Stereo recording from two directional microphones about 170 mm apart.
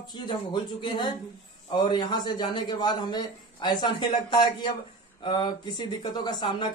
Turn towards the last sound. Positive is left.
turn(degrees=25)  # may be behind; listen again after turning